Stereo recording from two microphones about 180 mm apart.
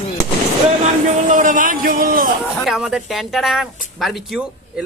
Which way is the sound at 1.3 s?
45° right (ahead or behind).